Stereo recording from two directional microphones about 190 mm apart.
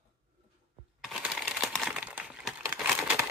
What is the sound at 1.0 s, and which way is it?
Crumpling, 5° right (ahead or behind).